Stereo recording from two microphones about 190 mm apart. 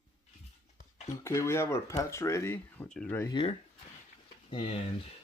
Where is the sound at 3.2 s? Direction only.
25° left (ahead or behind).